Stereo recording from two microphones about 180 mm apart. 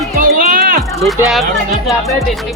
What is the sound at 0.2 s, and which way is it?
Music, 50° right (ahead or behind).